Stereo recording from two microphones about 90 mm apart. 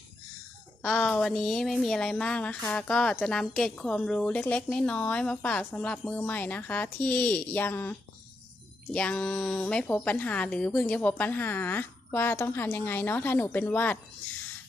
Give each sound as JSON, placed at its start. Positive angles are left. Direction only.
{"t": 0.9, "sound": "a woman's voice", "side_deg": 5}